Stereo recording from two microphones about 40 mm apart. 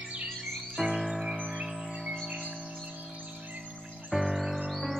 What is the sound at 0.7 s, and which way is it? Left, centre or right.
Music, centre.